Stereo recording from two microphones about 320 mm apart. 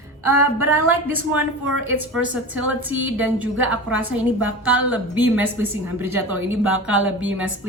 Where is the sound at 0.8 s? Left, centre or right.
Centre.